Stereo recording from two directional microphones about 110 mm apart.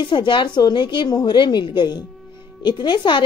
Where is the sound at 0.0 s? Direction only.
45° left (ahead or behind).